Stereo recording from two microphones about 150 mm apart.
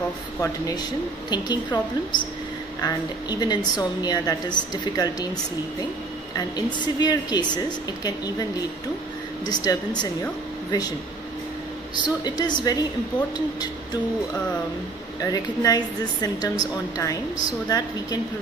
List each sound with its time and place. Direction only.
0.4 s a woman's voice: 25° left (ahead or behind)
6.3 s a woman's voice: 30° left (ahead or behind)
9.7 s a woman's voice: 25° left (ahead or behind)
12.0 s a woman's voice: 30° left (ahead or behind)
15.1 s a woman's voice: 25° left (ahead or behind)